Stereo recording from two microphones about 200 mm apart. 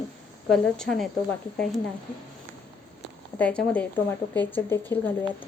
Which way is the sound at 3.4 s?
5° left (ahead or behind).